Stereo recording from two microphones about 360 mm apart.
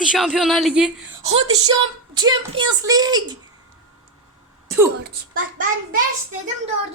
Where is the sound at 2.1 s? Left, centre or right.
Centre.